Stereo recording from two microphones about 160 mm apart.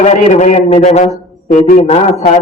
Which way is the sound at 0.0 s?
45° left (ahead or behind).